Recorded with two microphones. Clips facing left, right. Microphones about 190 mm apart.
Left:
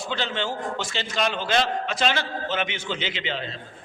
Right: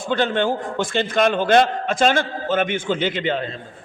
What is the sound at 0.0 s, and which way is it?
A man's voice, 55° right (ahead or behind).